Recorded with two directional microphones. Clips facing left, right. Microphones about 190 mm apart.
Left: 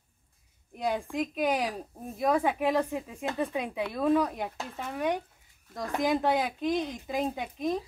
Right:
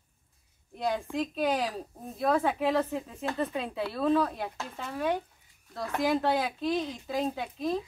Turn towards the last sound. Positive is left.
turn(degrees=15)  # may be behind; listen again after turning